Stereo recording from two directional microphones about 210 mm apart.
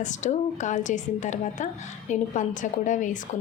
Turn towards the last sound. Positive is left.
turn(degrees=35)  # may be behind; listen again after turning